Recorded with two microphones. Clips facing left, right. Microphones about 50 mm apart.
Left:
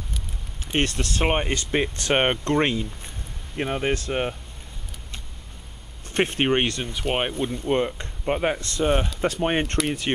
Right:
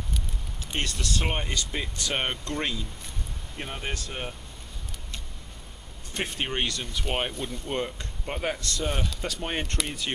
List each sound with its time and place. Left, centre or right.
0.7 s speech: left
6.1 s speech: left
6.9 s speech: left